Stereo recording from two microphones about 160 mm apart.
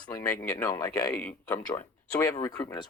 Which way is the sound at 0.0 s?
10° left (ahead or behind).